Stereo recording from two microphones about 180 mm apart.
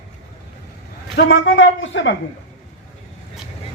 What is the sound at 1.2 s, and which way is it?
Speech, 85° left.